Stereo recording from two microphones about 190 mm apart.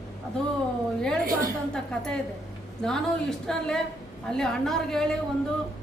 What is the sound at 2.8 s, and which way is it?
Speech, 5° left (ahead or behind).